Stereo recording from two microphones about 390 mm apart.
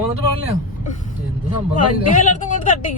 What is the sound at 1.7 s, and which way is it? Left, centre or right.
Speech, centre.